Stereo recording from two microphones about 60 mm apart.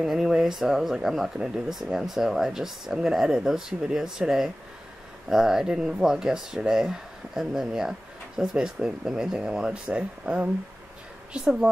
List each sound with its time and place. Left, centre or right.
0.0 s speech: centre